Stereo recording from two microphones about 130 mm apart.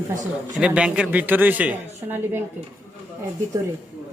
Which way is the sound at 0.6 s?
5° right (ahead or behind).